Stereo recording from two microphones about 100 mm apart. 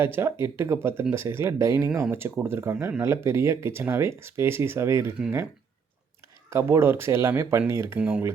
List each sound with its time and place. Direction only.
0.0 s speech: 25° right (ahead or behind)
6.5 s speech: 25° right (ahead or behind)
7.9 s speech: 10° right (ahead or behind)